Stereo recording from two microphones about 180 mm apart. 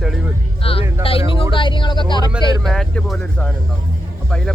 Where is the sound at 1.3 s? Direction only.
30° left (ahead or behind).